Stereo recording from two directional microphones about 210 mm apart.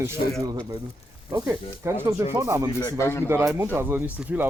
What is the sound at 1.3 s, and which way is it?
Speech, 15° right (ahead or behind).